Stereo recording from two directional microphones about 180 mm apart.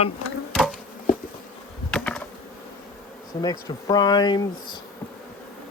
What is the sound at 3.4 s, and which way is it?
Speech, 20° left (ahead or behind).